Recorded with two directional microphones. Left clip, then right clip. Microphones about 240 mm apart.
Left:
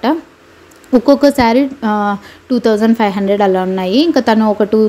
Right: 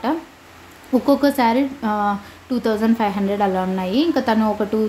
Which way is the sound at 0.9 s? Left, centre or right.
Left.